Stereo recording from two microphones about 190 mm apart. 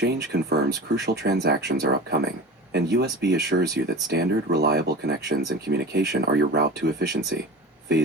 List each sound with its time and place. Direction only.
0.0 s speech: 60° right (ahead or behind)